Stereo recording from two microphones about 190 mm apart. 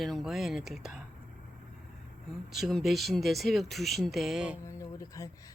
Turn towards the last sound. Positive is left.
turn(degrees=15)  # may be behind; listen again after turning